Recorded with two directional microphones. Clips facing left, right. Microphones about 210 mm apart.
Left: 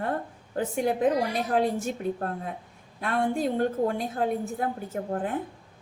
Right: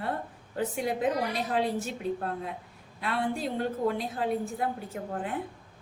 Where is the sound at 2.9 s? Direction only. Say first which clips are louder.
Left 4 dB; 45° left (ahead or behind).